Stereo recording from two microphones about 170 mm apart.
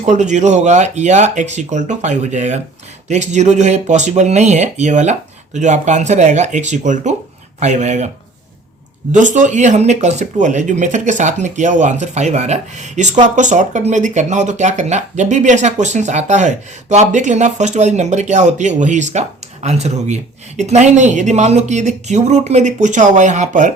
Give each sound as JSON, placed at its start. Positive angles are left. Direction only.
{"t": 0.0, "sound": "speech", "side_deg": -45}
{"t": 9.1, "sound": "speech", "side_deg": -45}